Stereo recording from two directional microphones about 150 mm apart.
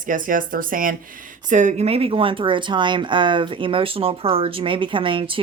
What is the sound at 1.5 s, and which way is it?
Speech, 55° right (ahead or behind).